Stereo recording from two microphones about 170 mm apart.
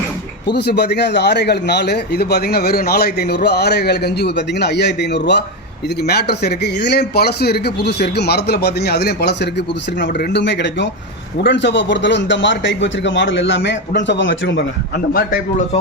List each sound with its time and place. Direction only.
0.5 s a man's voice: 75° left (ahead or behind)
6.0 s a man's voice: 70° left (ahead or behind)